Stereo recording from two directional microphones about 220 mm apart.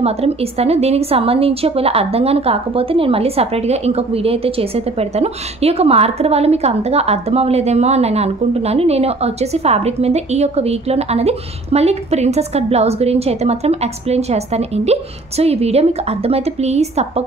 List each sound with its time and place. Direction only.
0.0 s a woman's voice: 30° right (ahead or behind)